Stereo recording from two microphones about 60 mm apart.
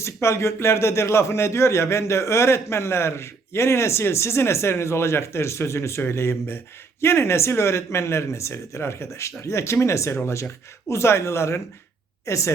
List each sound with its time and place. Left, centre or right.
0.0 s speech: left